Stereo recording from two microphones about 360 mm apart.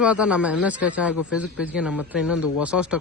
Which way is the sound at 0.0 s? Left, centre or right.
Centre.